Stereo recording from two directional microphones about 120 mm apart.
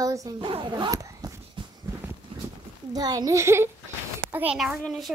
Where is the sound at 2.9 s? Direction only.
30° right (ahead or behind).